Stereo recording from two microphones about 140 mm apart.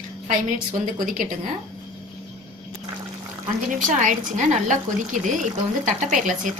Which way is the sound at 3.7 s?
70° right (ahead or behind).